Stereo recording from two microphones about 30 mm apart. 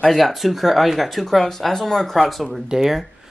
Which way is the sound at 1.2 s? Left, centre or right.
Centre.